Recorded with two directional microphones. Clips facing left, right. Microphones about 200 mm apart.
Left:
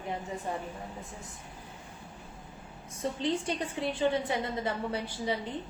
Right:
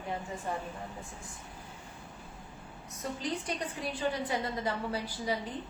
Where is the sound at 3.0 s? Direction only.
25° left (ahead or behind).